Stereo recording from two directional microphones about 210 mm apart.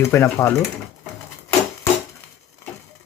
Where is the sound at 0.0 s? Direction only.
15° left (ahead or behind).